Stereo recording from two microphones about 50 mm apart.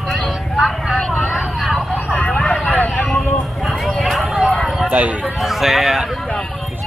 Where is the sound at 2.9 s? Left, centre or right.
Centre.